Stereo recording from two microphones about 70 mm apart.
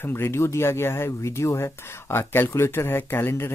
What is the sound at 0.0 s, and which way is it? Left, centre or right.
Speech, left.